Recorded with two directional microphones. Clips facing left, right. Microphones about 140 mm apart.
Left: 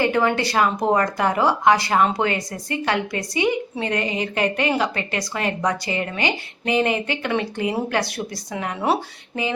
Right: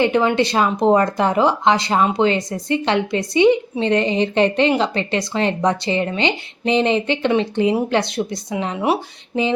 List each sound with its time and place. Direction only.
0.0 s speech: 20° right (ahead or behind)